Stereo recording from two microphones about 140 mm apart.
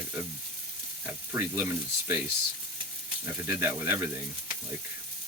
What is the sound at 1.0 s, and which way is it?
Speech, 20° right (ahead or behind).